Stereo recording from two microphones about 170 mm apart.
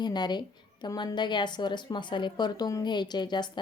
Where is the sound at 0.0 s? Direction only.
25° left (ahead or behind).